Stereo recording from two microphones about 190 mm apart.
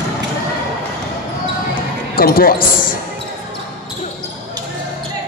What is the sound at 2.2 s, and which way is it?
Speech, 50° left (ahead or behind).